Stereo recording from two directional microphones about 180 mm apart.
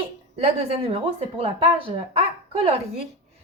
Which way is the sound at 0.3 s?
35° right (ahead or behind).